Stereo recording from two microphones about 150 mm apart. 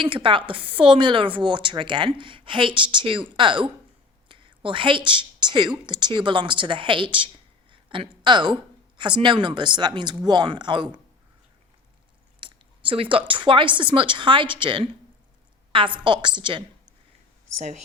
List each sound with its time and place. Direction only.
0.0 s speech: 35° right (ahead or behind)
7.7 s a sound: 35° right (ahead or behind)
9.0 s speech: 30° right (ahead or behind)
12.4 s speech: 35° right (ahead or behind)